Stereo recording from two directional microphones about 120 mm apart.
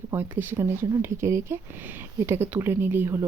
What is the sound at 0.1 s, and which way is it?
Speech, 15° right (ahead or behind).